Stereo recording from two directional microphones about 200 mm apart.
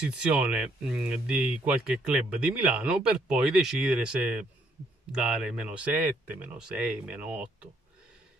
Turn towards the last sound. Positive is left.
turn(degrees=-5)  # may be behind; listen again after turning